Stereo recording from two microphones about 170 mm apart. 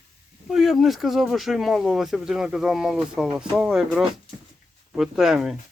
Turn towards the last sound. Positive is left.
turn(degrees=0)  # may be behind; listen again after turning